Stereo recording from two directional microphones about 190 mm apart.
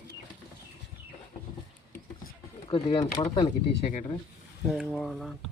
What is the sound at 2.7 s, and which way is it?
Speech, 25° left (ahead or behind).